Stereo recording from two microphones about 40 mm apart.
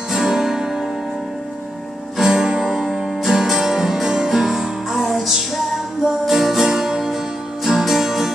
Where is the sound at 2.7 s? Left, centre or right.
Centre.